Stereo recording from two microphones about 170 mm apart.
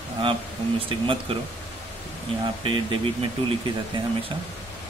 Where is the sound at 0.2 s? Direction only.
30° right (ahead or behind).